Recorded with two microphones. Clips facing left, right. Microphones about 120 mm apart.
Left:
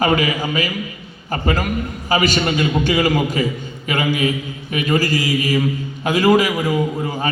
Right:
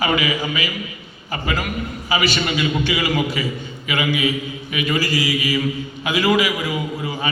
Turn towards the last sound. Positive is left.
turn(degrees=45)  # may be behind; listen again after turning